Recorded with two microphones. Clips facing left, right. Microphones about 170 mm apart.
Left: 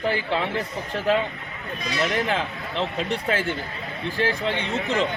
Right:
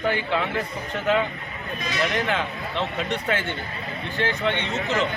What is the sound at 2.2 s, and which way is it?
A man's voice, 35° left (ahead or behind).